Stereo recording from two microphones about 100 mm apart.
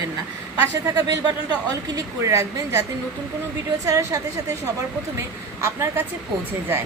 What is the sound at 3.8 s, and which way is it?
Speech, 35° right (ahead or behind).